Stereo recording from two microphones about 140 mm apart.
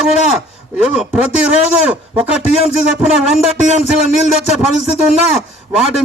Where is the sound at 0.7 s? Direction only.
5° right (ahead or behind).